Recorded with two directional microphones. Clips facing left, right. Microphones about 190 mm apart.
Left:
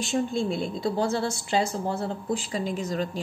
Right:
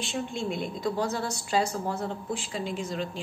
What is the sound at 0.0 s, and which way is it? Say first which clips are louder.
A woman's voice: left 6 dB; 40° left (ahead or behind).